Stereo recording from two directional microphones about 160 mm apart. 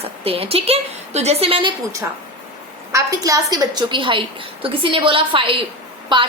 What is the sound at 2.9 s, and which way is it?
A woman's voice, 20° right (ahead or behind).